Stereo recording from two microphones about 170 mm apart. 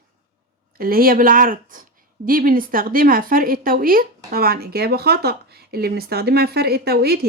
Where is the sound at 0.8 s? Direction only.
60° right (ahead or behind).